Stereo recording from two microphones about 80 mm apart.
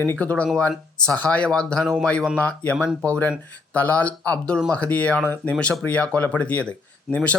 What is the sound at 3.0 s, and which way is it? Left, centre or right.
Speech, centre.